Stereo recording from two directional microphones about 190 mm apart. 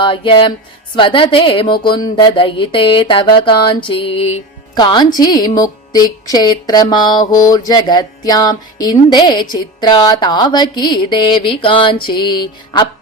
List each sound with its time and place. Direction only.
0.0 s speech: 25° left (ahead or behind)